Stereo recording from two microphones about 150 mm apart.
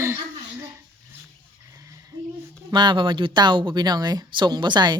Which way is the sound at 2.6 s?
30° right (ahead or behind).